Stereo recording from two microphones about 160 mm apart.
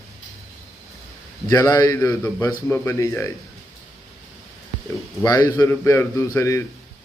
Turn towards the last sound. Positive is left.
turn(degrees=15)  # may be behind; listen again after turning